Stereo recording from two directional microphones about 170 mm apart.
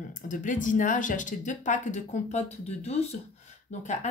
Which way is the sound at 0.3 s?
50° left (ahead or behind).